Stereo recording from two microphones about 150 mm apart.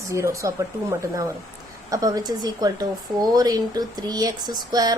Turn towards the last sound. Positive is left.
turn(degrees=-25)  # may be behind; listen again after turning